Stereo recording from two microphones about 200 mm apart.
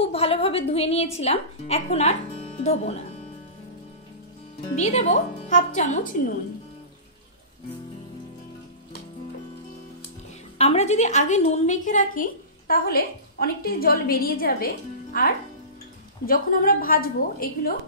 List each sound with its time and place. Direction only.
0.0 s a woman's voice: 30° left (ahead or behind)
4.7 s a woman's voice: 35° left (ahead or behind)
10.6 s a woman's voice: 30° left (ahead or behind); by 14.7 s 45° left (ahead or behind)
16.3 s a woman's voice: 45° left (ahead or behind)